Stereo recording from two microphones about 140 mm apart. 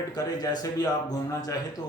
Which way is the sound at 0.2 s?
25° left (ahead or behind).